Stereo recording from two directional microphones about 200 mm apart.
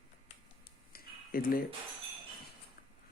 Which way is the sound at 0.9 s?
45° left (ahead or behind).